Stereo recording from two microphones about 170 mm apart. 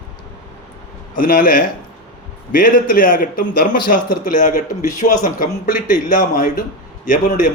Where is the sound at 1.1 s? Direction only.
55° left (ahead or behind).